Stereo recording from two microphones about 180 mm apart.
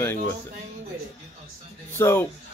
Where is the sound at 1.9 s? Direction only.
15° left (ahead or behind).